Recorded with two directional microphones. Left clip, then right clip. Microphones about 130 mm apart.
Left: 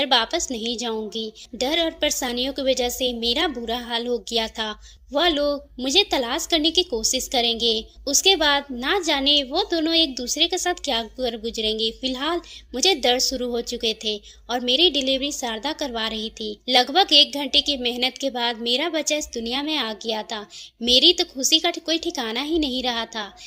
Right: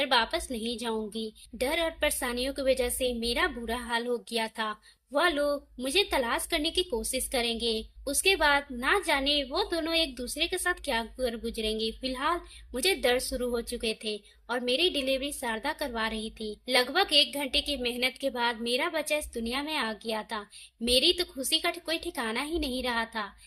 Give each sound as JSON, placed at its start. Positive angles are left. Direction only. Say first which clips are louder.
{"t": 0.0, "sound": "a woman's voice", "louder": "left 6 dB", "side_deg": 30}